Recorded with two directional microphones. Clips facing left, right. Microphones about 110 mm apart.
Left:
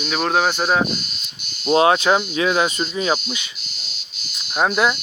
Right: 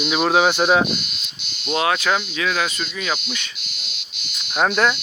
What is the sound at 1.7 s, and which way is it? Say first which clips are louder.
Cricket: left 5 dB; 30° left (ahead or behind).